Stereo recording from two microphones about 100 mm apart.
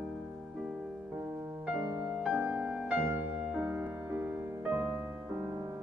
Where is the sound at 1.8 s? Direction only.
30° right (ahead or behind).